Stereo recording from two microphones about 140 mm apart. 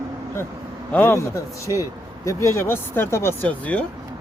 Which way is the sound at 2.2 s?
20° left (ahead or behind).